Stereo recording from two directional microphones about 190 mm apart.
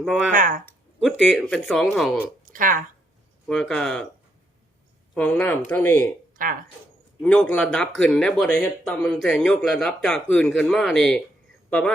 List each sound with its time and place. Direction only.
0.0 s speech: centre (ahead or behind)
0.3 s speech: 45° right (ahead or behind)
0.6 s a sound: 5° left (ahead or behind)
1.2 s speech: centre (ahead or behind)
2.4 s a sound: 45° right (ahead or behind)
3.4 s speech: 5° left (ahead or behind)
5.1 s speech: 10° left (ahead or behind)
6.3 s speech: 45° right (ahead or behind)
7.2 s speech: 5° left (ahead or behind)